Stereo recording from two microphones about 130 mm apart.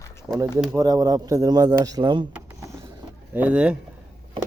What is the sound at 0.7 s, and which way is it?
Speech, 30° right (ahead or behind).